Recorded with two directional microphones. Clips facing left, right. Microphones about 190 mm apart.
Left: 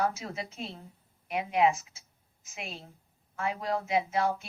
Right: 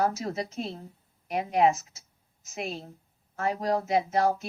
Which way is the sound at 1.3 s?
40° right (ahead or behind).